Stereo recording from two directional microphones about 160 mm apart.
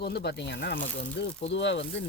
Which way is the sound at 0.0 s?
90° left.